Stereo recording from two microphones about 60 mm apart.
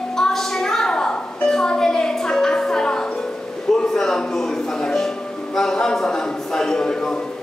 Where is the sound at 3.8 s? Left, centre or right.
Centre.